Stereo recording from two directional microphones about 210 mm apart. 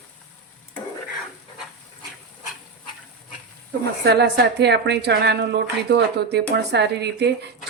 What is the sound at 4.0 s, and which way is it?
A woman's voice, 50° right (ahead or behind).